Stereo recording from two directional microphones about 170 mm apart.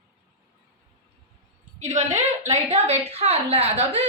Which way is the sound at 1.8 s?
45° right (ahead or behind).